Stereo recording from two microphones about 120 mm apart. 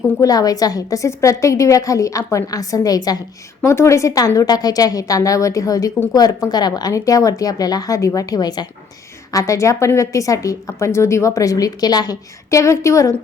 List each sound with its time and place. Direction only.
0.2 s a woman's voice: 30° left (ahead or behind)